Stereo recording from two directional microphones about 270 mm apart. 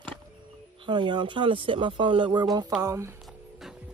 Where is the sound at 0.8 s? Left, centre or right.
Centre.